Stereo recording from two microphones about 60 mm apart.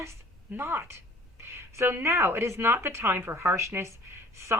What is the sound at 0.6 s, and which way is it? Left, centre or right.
A woman's voice, right.